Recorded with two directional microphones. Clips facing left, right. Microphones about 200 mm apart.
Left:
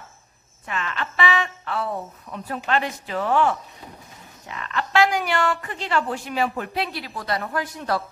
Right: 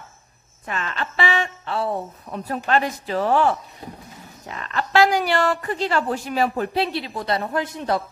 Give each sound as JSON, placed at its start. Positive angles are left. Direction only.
{"t": 0.7, "sound": "a woman's voice", "side_deg": -40}